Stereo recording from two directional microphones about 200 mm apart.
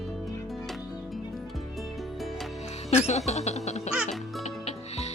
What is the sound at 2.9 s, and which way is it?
Speech, 35° left (ahead or behind).